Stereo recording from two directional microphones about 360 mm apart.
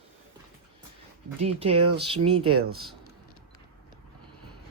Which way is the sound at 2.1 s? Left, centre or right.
Centre.